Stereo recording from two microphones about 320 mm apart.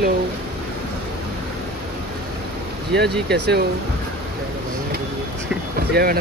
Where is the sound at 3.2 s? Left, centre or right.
Right.